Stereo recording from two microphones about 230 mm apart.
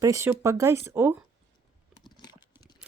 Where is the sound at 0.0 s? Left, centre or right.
Centre.